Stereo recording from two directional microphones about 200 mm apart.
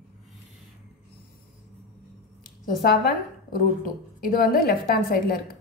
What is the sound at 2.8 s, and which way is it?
A woman's voice, 45° left (ahead or behind).